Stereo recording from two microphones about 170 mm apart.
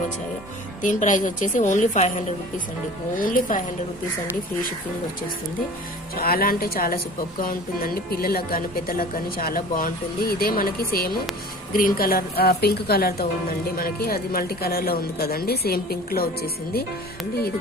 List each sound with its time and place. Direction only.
0.8 s a woman's voice: 50° left (ahead or behind)
3.2 s a woman's voice: 55° left (ahead or behind)
6.1 s a woman's voice: 60° left (ahead or behind)